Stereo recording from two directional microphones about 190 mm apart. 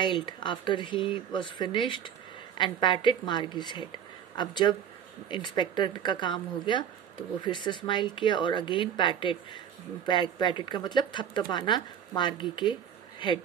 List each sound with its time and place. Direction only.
0.0 s speech: 25° left (ahead or behind)